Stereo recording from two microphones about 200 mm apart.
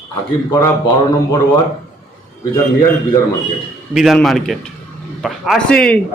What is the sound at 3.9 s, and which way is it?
A man's voice, centre (ahead or behind).